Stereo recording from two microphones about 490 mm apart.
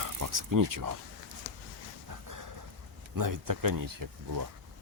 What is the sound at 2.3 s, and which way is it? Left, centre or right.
Dog, right.